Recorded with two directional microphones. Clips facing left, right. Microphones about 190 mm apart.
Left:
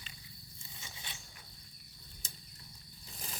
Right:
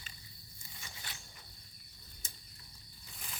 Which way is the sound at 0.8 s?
20° left (ahead or behind).